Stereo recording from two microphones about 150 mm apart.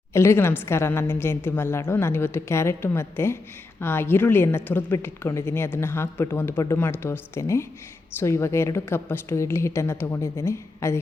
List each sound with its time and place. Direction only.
0.1 s a woman's voice: 15° left (ahead or behind)